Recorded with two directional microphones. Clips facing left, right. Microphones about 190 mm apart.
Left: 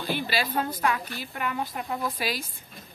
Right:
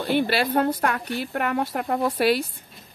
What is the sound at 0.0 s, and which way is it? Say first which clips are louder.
A woman's voice: right 7 dB; 65° right (ahead or behind).